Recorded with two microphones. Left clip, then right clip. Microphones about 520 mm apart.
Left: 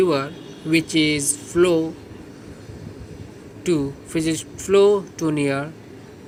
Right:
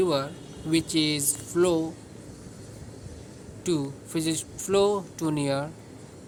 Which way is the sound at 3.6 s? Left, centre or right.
Right.